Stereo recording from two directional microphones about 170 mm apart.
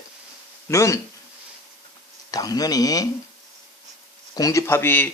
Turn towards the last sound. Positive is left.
turn(degrees=10)  # may be behind; listen again after turning